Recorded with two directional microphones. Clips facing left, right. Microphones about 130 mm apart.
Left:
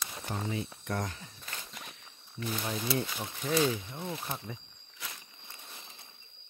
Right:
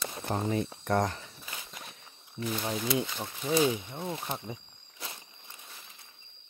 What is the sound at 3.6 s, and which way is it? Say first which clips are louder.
Speech: right 2 dB; 20° right (ahead or behind).